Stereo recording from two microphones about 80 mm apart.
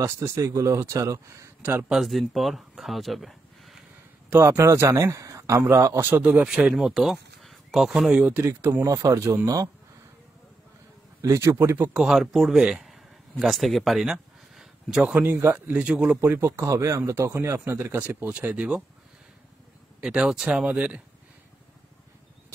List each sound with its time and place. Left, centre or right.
0.0 s speech: right
1.6 s speech: right
1.9 s speech: centre
4.3 s speech: right
5.9 s speech: right
6.4 s speech: centre
8.5 s speech: right
11.1 s speech: right
11.9 s speech: centre
16.2 s speech: right
17.9 s speech: right
20.0 s speech: centre